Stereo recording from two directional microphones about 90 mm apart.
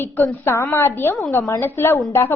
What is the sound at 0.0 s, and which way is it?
A woman's voice, 30° left (ahead or behind).